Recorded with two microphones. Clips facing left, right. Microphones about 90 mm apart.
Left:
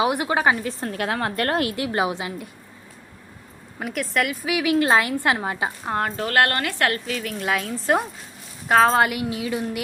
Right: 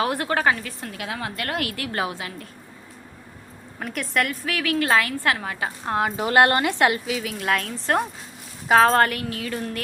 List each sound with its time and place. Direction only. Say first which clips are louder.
0.0 s speech: left 2 dB; 15° left (ahead or behind)
0.8 s a woman's voice: left 6 dB; 45° left (ahead or behind)
1.5 s a woman's voice: left 4 dB; 25° left (ahead or behind)
3.8 s a woman's voice: left 1 dB; 5° left (ahead or behind)
4.4 s a woman's voice: left 3 dB; 15° left (ahead or behind)
5.8 s a woman's voice: right 3 dB; 5° right (ahead or behind)
6.2 s a woman's voice: right 4 dB; 20° right (ahead or behind); by 9.0 s centre (ahead or behind)
9.0 s speech: left 3 dB; 15° left (ahead or behind)